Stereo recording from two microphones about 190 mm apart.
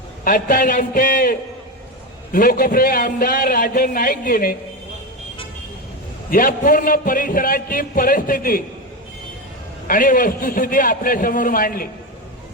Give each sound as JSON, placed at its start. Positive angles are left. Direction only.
{"t": 0.3, "sound": "a man's voice", "side_deg": 45}
{"t": 6.3, "sound": "a man's voice", "side_deg": 45}
{"t": 9.8, "sound": "a man's voice", "side_deg": 45}